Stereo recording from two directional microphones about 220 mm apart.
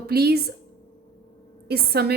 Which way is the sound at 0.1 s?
45° right (ahead or behind).